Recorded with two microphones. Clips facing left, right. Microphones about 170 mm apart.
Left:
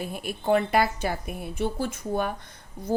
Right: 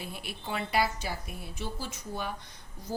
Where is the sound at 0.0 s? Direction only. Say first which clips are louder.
Left 10 dB; 45° left (ahead or behind).